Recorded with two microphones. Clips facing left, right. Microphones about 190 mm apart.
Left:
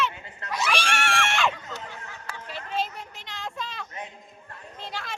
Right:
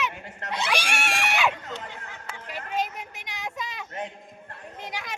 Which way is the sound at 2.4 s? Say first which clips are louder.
Right 1 dB; 10° right (ahead or behind).